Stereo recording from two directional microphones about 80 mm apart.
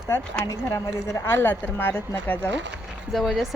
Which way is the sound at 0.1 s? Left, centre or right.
Left.